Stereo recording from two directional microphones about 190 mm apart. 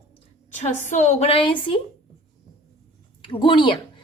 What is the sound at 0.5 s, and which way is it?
A woman's voice, 40° left (ahead or behind).